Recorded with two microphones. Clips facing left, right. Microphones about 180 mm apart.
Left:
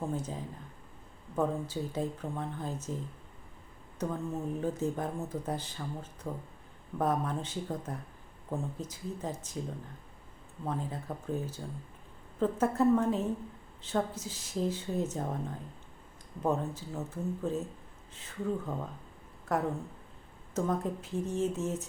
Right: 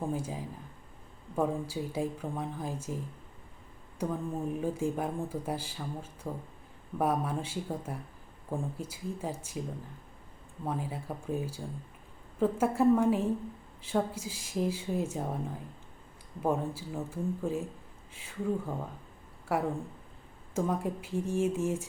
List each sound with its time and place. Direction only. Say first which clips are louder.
0.1 s a woman's voice: right 1 dB; 10° right (ahead or behind)